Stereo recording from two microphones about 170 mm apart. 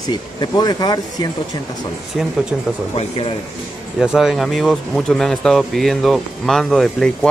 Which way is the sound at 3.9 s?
Centre (ahead or behind).